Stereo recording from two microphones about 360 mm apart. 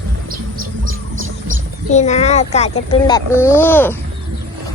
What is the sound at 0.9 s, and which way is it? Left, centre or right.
Music, right.